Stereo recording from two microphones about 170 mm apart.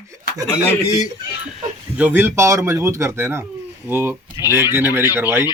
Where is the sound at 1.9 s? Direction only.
10° right (ahead or behind).